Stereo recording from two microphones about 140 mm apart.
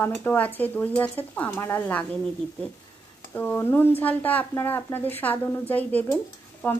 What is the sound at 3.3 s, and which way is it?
Speech, 15° left (ahead or behind).